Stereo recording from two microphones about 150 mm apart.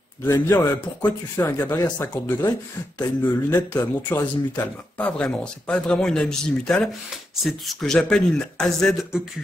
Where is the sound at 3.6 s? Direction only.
25° left (ahead or behind).